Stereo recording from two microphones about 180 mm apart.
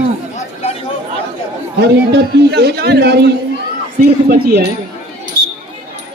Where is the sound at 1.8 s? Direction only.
65° right (ahead or behind).